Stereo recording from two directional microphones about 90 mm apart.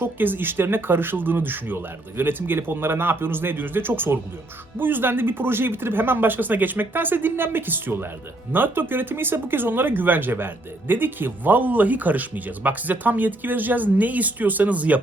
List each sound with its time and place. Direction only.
0.0 s speech: 20° right (ahead or behind)